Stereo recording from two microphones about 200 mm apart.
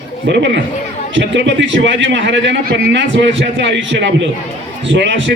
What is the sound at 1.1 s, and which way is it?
A man's voice, 65° right (ahead or behind).